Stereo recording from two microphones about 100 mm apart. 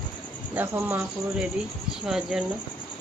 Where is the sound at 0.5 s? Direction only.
20° right (ahead or behind).